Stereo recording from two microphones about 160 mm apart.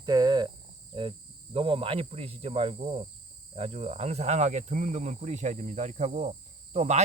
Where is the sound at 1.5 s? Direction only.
35° right (ahead or behind).